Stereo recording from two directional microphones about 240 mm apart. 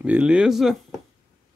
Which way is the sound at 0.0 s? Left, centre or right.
Centre.